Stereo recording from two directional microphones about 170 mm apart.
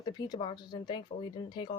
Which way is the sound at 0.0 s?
25° left (ahead or behind).